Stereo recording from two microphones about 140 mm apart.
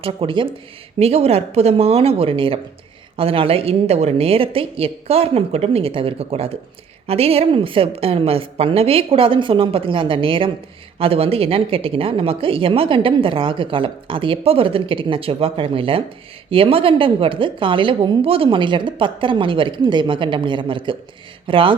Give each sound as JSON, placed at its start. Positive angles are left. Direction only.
{"t": 0.0, "sound": "a woman's voice", "side_deg": -40}